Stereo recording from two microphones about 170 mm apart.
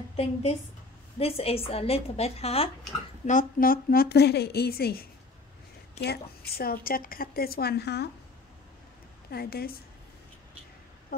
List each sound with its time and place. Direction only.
0.1 s a woman's voice: 40° left (ahead or behind)
3.3 s a woman's voice: 50° left (ahead or behind)
6.0 s a woman's voice: 65° left (ahead or behind)
9.3 s a woman's voice: 65° left (ahead or behind)